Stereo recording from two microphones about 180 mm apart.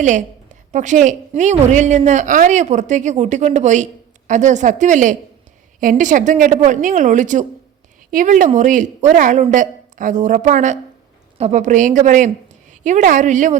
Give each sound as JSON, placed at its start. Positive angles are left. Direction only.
{"t": 0.0, "sound": "a woman's voice", "side_deg": -45}